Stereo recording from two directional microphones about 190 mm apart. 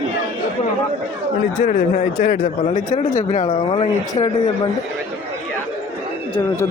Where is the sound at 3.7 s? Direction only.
20° left (ahead or behind).